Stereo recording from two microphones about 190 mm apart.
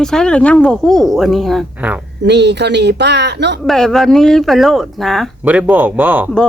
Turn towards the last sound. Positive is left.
turn(degrees=-10)  # may be behind; listen again after turning